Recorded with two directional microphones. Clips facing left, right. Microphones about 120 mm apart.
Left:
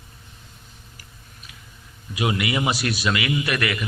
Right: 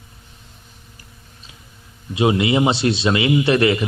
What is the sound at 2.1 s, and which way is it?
A man's voice, 25° right (ahead or behind).